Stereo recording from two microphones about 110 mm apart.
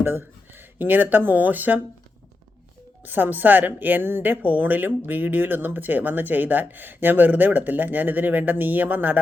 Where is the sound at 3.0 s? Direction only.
15° right (ahead or behind).